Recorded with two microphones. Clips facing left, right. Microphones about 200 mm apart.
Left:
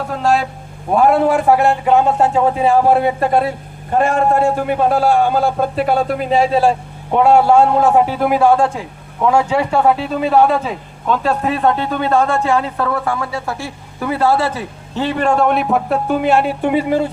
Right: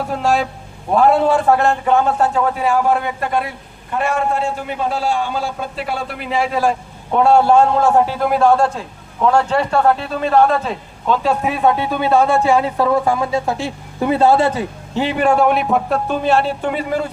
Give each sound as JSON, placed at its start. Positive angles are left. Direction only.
{"t": 0.9, "sound": "a man's voice", "side_deg": 10}
{"t": 3.9, "sound": "a man's voice", "side_deg": 50}
{"t": 7.1, "sound": "a man's voice", "side_deg": 15}